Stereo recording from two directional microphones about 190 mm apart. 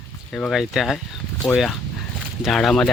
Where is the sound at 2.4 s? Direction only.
Centre (ahead or behind).